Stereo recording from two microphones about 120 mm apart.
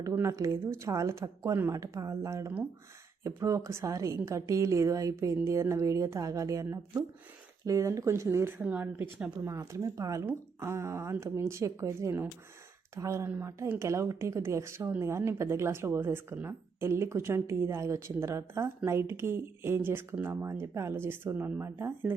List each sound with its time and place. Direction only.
0.0 s a woman's voice: 25° right (ahead or behind)
1.5 s speech: 15° right (ahead or behind)
1.8 s a woman's voice: 30° right (ahead or behind)
8.5 s speech: 10° right (ahead or behind)
9.4 s a woman's voice: 25° right (ahead or behind)